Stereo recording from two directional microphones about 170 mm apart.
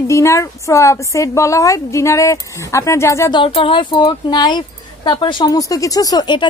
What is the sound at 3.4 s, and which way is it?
Speech, 30° left (ahead or behind).